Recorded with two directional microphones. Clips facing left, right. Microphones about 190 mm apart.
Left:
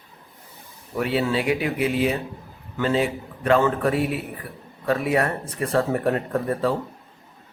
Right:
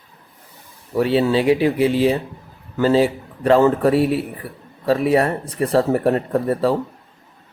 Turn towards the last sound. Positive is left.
turn(degrees=-35)  # may be behind; listen again after turning